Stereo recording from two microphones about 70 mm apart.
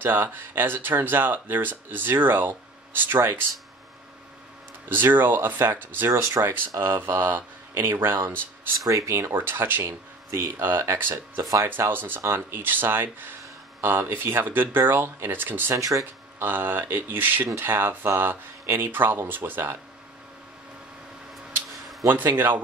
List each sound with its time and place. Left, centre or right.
0.0 s speech: right
4.8 s speech: right
8.8 s speech: right
9.1 s speech: right
15.7 s speech: right
16.3 s speech: right
21.6 s a sound: centre
22.0 s speech: right